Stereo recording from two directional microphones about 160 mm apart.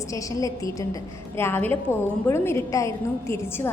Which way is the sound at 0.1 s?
20° left (ahead or behind).